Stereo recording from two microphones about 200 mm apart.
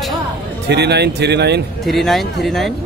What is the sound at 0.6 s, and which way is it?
Speech, 55° right (ahead or behind).